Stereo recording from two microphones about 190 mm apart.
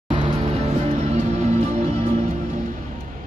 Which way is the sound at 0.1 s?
30° right (ahead or behind).